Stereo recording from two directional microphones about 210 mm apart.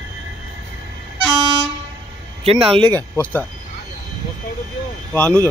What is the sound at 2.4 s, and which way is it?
Speech, 25° right (ahead or behind).